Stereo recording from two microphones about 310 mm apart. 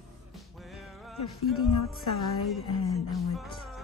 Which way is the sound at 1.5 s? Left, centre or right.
Left.